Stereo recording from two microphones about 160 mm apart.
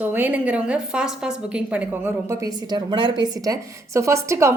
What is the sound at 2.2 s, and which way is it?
A woman's voice, 25° right (ahead or behind).